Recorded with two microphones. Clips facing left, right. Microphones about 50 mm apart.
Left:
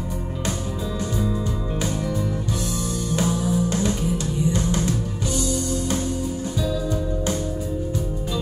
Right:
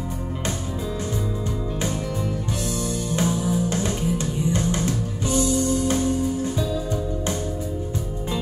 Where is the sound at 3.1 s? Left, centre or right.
Right.